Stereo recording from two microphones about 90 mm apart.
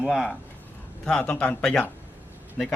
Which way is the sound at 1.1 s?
10° left (ahead or behind).